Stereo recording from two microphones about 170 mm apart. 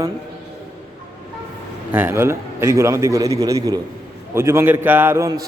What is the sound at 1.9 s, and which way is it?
A man's voice, 15° right (ahead or behind).